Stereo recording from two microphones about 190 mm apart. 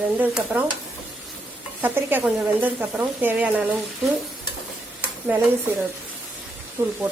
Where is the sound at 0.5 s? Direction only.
10° right (ahead or behind).